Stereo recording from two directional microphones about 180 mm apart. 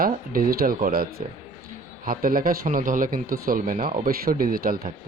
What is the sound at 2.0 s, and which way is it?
A man's voice, 50° right (ahead or behind).